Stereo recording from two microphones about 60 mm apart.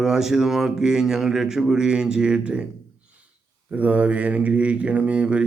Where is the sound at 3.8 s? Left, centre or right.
Right.